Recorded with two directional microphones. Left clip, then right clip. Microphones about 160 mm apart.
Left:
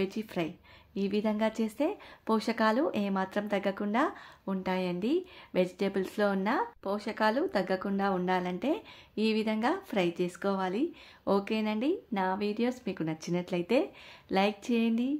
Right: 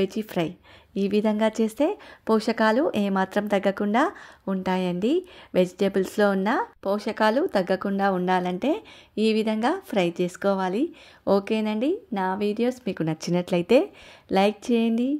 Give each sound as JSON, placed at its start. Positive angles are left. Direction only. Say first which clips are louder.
{"t": 0.0, "sound": "speech", "louder": "right 7 dB", "side_deg": -40}